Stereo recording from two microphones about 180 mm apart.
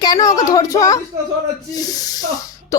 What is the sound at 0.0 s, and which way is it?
A woman's voice, 20° left (ahead or behind).